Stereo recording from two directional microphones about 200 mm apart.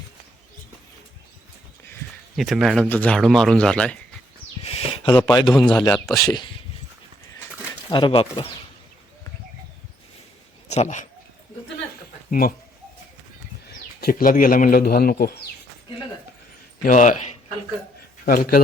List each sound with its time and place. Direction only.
2.3 s speech: centre (ahead or behind)
4.6 s a sound: 30° left (ahead or behind)
5.2 s speech: 20° left (ahead or behind)
7.9 s speech: 25° left (ahead or behind)
10.7 s speech: 35° left (ahead or behind)
12.3 s a man's voice: 45° left (ahead or behind)
14.0 s a man's voice: 45° left (ahead or behind)
16.8 s speech: 40° left (ahead or behind)
18.3 s a man's voice: 45° left (ahead or behind)